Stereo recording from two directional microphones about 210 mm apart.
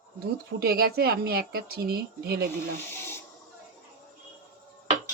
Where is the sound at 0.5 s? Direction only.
45° right (ahead or behind).